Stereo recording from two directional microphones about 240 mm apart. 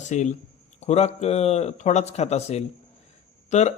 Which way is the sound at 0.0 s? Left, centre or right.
Left.